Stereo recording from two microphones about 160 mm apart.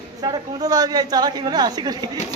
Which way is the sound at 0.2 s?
25° right (ahead or behind).